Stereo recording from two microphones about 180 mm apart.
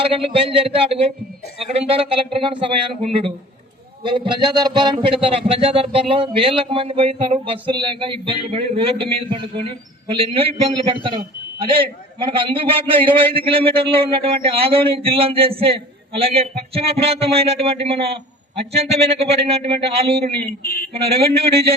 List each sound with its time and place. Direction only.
0.0 s speech: 30° right (ahead or behind)
20.6 s speech: 55° left (ahead or behind)
20.9 s speech: 35° right (ahead or behind)